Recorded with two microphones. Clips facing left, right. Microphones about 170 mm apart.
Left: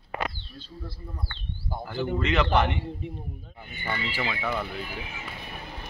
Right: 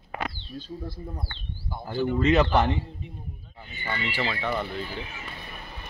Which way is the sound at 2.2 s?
35° right (ahead or behind).